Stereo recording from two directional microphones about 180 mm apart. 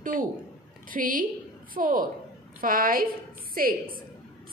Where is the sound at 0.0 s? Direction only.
50° right (ahead or behind).